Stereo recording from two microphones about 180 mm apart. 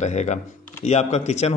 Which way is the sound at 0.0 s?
40° left (ahead or behind).